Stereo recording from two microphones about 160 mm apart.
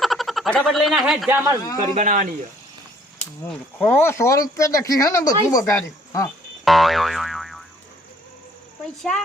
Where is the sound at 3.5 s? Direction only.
10° left (ahead or behind).